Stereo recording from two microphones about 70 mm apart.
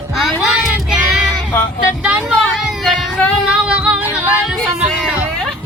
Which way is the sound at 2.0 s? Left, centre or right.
Centre.